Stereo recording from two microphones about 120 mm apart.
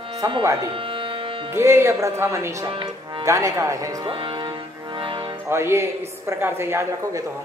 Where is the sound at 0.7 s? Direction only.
45° right (ahead or behind).